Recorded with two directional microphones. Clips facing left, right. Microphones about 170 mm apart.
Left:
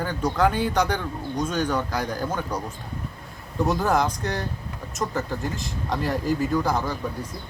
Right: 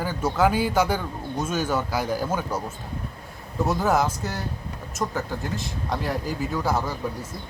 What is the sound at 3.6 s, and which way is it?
Speech, centre (ahead or behind).